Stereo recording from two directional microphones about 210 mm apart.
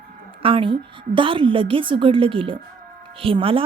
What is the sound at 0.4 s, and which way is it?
A woman's voice, 25° right (ahead or behind).